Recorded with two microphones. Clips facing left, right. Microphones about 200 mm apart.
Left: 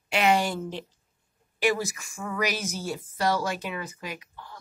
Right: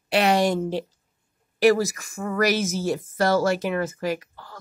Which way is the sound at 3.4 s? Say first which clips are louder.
Right 9 dB; 45° right (ahead or behind).